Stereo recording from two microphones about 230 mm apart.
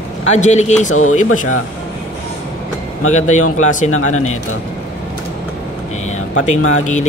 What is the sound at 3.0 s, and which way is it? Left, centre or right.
Speech, left.